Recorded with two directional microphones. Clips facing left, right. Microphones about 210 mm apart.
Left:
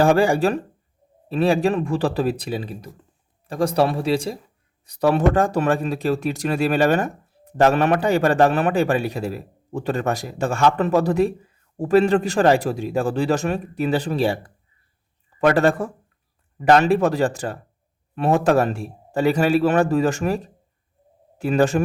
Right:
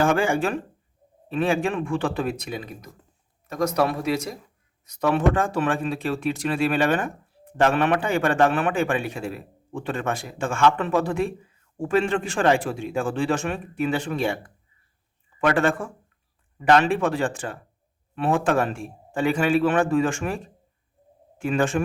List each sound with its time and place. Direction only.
0.0 s speech: 35° left (ahead or behind)